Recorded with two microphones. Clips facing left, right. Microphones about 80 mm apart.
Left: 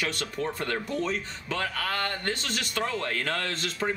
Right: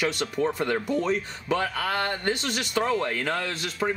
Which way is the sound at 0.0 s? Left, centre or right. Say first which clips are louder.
Right 5 dB; centre.